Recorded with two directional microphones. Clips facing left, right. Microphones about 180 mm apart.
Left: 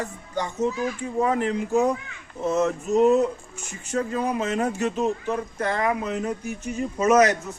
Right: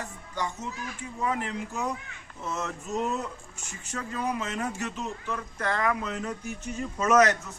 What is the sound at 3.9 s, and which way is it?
Speech, 35° left (ahead or behind).